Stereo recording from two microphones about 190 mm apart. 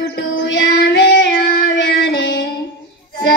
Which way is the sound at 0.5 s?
60° left (ahead or behind).